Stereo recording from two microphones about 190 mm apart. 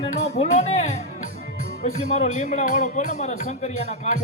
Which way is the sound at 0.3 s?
35° left (ahead or behind).